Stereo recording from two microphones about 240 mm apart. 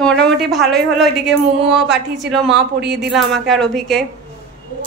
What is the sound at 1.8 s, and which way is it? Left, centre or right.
Speech, right.